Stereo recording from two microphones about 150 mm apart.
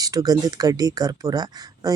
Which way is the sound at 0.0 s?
25° right (ahead or behind).